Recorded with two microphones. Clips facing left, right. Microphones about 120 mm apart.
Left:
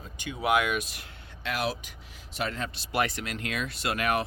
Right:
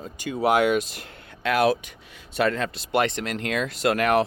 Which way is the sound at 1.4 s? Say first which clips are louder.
Right 10 dB; 60° right (ahead or behind).